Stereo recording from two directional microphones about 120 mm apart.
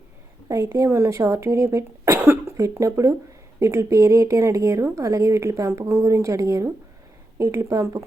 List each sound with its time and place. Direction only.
0.4 s a woman's voice: 30° right (ahead or behind)
2.1 s cough: 15° right (ahead or behind)
2.6 s a woman's voice: 25° right (ahead or behind)